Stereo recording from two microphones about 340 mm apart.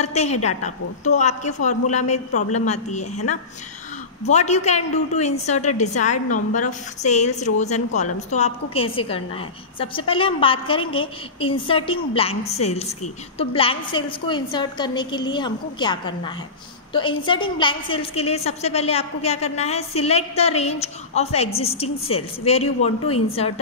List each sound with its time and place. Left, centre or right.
0.0 s a woman's voice: centre
4.3 s a woman's voice: centre